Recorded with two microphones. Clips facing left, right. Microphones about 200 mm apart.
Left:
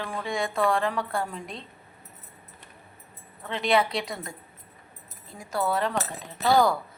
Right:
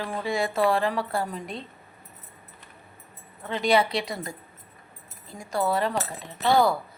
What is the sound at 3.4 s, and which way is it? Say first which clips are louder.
A woman's voice: right 2 dB; centre (ahead or behind).